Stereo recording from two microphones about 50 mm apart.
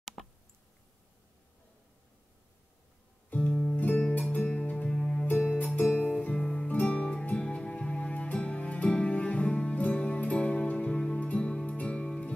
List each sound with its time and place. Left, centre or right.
0.2 s a sound: centre
3.3 s music: centre
3.7 s music: left; by 5.2 s centre
5.8 s music: left
6.3 s music: centre
6.7 s music: left